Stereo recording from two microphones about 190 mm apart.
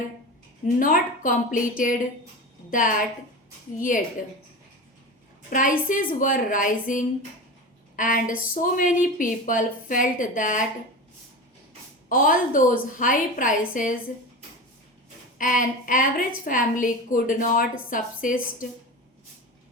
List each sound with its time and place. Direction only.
0.8 s a woman's voice: 45° left (ahead or behind)
5.5 s a woman's voice: 45° left (ahead or behind)
12.0 s a woman's voice: 45° left (ahead or behind)
15.4 s a woman's voice: 45° left (ahead or behind)